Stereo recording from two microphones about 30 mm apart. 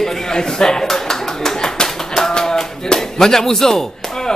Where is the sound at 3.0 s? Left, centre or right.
Centre.